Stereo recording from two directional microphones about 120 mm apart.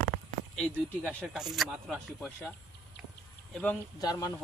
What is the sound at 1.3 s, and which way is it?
Speech, 5° right (ahead or behind).